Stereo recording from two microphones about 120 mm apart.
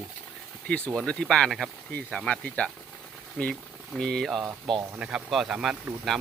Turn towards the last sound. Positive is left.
turn(degrees=-5)  # may be behind; listen again after turning